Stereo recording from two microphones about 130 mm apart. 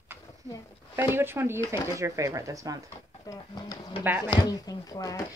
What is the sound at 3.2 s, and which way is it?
Speech, 30° left (ahead or behind).